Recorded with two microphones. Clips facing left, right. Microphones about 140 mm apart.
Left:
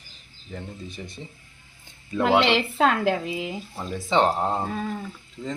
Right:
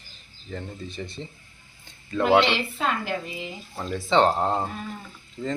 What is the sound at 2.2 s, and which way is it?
Speech, 90° left.